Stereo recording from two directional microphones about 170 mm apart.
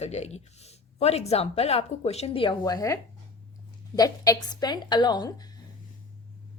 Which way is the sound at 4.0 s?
25° left (ahead or behind).